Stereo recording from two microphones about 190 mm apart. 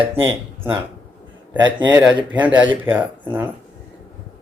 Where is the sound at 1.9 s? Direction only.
10° right (ahead or behind).